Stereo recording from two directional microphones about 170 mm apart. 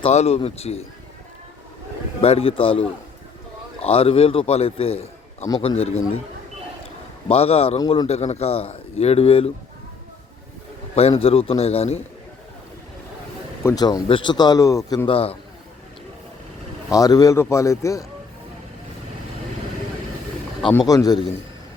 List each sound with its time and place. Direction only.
0.0 s a man's voice: 40° left (ahead or behind)
2.2 s a man's voice: 35° left (ahead or behind)
3.8 s a man's voice: 35° left (ahead or behind)
7.3 s a man's voice: 35° left (ahead or behind)
11.2 s a man's voice: 35° left (ahead or behind)
13.6 s speech: 20° left (ahead or behind)
15.1 s a man's voice: 35° left (ahead or behind)
16.9 s speech: 20° left (ahead or behind)
20.8 s speech: 20° left (ahead or behind)